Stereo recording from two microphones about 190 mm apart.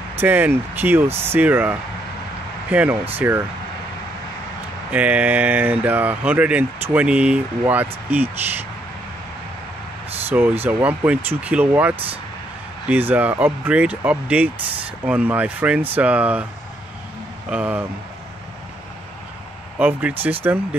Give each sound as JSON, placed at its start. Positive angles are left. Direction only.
{"t": 0.1, "sound": "speech", "side_deg": -10}
{"t": 4.9, "sound": "speech", "side_deg": -5}
{"t": 10.3, "sound": "speech", "side_deg": -10}
{"t": 17.5, "sound": "speech", "side_deg": -5}
{"t": 19.8, "sound": "speech", "side_deg": -10}